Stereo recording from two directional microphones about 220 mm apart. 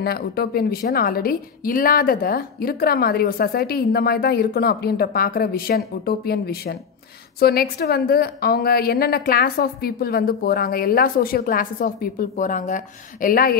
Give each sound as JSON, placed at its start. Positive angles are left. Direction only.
{"t": 0.0, "sound": "a woman's voice", "side_deg": 45}